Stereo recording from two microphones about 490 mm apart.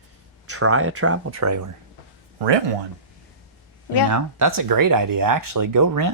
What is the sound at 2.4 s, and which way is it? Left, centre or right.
Speech, right.